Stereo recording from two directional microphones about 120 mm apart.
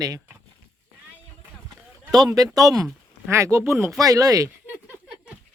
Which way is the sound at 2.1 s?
30° right (ahead or behind).